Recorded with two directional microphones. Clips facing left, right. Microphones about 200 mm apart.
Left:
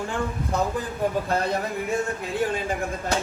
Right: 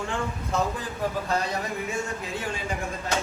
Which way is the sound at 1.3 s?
55° left (ahead or behind).